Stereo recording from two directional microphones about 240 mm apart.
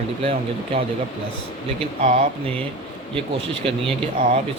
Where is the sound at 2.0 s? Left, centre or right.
Right.